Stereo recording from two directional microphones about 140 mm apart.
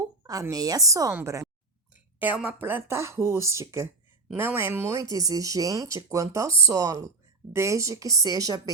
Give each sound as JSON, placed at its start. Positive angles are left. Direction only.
{"t": 0.2, "sound": "speech", "side_deg": -25}